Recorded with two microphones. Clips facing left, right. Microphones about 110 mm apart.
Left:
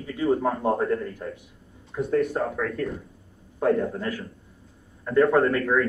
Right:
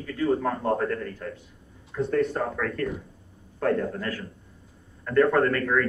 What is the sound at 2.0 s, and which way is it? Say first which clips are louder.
Speech: left 1 dB; 5° left (ahead or behind).